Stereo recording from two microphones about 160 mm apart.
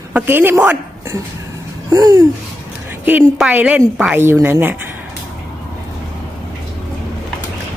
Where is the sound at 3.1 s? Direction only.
10° right (ahead or behind).